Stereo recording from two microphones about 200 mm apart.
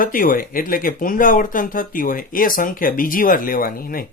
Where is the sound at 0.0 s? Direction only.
45° left (ahead or behind).